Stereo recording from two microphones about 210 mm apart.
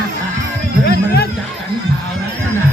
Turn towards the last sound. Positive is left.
turn(degrees=50)  # may be behind; listen again after turning